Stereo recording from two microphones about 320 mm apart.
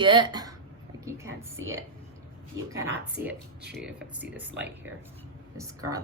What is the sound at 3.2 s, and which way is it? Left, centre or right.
Speech, right.